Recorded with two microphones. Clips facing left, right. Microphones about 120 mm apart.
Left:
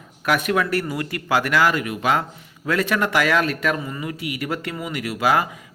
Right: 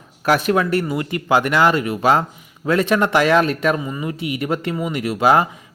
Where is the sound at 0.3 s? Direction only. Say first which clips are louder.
Right 4 dB; 30° right (ahead or behind).